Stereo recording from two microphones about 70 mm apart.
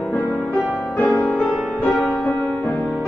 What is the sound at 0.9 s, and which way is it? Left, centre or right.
Music, left.